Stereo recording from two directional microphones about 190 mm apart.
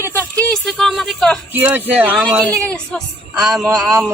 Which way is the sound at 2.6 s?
5° left (ahead or behind).